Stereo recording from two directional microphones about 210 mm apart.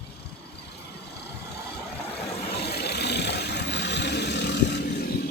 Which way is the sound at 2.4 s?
50° left (ahead or behind).